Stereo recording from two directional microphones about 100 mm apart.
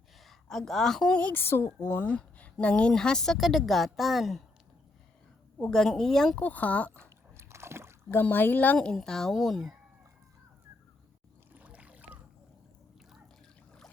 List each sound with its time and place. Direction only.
0.2 s a woman's voice: centre (ahead or behind)
5.5 s a woman's voice: 5° left (ahead or behind)
6.4 s speech: 15° left (ahead or behind)
7.3 s a sound: 25° right (ahead or behind)
8.1 s speech: 20° left (ahead or behind); by 9.7 s centre (ahead or behind)
11.5 s boat: 15° right (ahead or behind)